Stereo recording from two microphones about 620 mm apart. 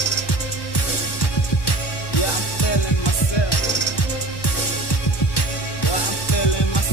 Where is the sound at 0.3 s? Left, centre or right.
Left.